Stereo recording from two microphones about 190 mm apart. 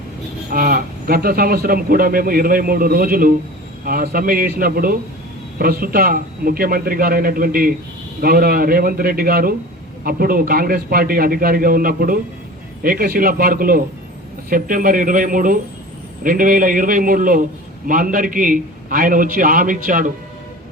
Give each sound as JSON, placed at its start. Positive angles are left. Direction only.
{"t": 0.5, "sound": "speech", "side_deg": -50}